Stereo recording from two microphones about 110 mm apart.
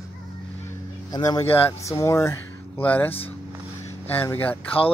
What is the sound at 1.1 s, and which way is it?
Speech, 35° left (ahead or behind).